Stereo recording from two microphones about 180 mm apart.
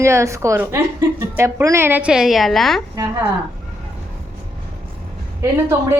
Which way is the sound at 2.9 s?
15° right (ahead or behind).